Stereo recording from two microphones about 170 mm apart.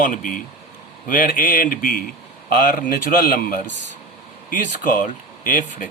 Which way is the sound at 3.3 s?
55° left (ahead or behind).